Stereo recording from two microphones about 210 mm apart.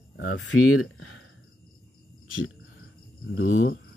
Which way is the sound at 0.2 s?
65° left (ahead or behind).